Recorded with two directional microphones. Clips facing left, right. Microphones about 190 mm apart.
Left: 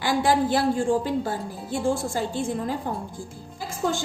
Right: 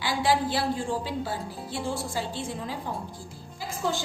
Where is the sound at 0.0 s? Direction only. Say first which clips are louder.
Left 4 dB; 50° left (ahead or behind).